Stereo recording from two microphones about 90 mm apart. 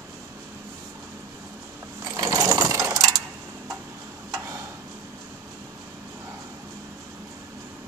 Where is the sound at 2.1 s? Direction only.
40° right (ahead or behind).